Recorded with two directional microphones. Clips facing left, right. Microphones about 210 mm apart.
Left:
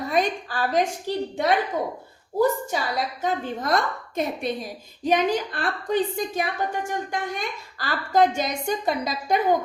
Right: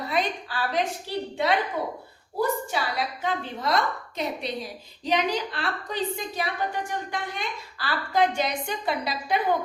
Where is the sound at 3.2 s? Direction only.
45° left (ahead or behind).